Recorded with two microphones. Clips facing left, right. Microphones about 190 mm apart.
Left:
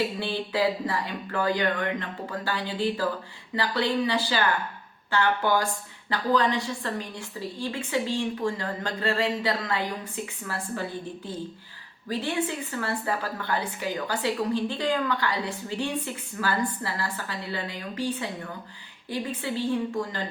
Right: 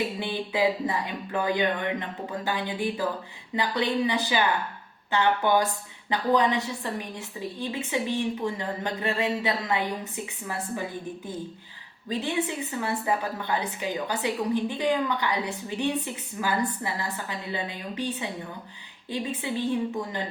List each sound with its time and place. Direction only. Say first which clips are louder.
0.2 s a woman's voice: even; 15° right (ahead or behind)
12.0 s a woman's voice: even; 20° right (ahead or behind)